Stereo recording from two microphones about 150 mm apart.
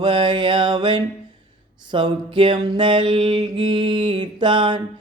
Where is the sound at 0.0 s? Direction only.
35° right (ahead or behind).